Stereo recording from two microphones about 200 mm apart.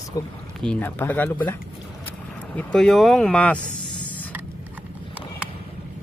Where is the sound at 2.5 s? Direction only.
5° left (ahead or behind).